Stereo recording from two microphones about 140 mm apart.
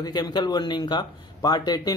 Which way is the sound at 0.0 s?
30° left (ahead or behind).